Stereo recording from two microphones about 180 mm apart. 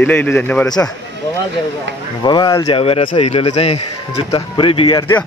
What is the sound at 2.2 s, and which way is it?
Speech, 25° left (ahead or behind).